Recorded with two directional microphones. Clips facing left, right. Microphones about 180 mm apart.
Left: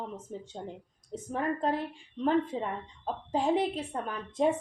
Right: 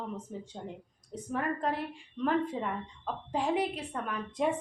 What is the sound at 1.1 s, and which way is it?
A woman's voice, 30° left (ahead or behind).